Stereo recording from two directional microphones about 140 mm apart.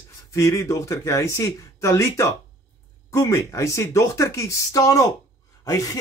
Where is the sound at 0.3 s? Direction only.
25° left (ahead or behind).